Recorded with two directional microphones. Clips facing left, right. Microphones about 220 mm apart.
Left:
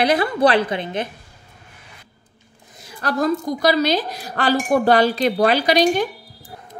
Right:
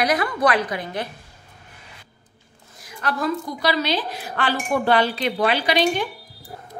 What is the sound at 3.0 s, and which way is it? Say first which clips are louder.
A woman's voice: left 4 dB; 45° left (ahead or behind).